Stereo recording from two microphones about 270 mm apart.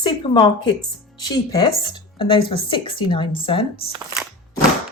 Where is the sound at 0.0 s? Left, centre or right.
Centre.